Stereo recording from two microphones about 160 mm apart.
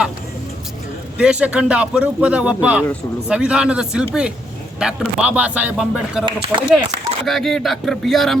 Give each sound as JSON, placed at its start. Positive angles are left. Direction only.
{"t": 1.2, "sound": "speech", "side_deg": -5}
{"t": 6.2, "sound": "speech", "side_deg": -30}
{"t": 7.3, "sound": "speech", "side_deg": 0}